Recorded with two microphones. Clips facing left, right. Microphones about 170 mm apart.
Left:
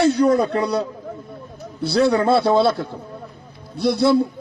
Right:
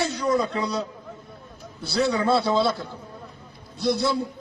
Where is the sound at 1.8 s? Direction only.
60° left (ahead or behind).